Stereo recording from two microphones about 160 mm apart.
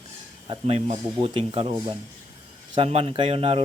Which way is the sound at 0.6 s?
45° right (ahead or behind).